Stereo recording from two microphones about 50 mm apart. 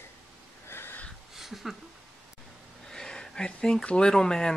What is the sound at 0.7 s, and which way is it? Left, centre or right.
Wheeze, left.